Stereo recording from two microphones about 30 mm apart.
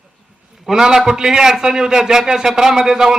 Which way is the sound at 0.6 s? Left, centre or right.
Centre.